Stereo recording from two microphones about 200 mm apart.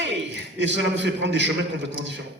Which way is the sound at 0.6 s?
65° right (ahead or behind).